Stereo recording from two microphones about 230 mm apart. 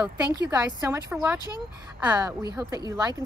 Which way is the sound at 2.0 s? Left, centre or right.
Centre.